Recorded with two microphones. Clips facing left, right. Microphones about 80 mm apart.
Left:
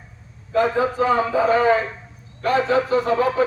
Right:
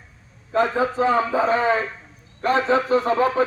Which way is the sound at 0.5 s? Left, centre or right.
Right.